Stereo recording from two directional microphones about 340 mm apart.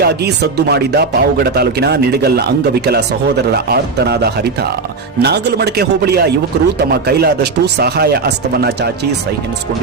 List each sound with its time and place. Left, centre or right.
0.0 s speech: right
3.5 s speech: right